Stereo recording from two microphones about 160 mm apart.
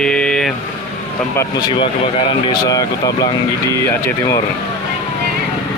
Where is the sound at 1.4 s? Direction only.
30° left (ahead or behind).